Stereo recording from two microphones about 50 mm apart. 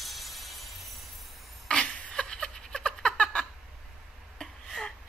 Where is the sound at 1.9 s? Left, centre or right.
Centre.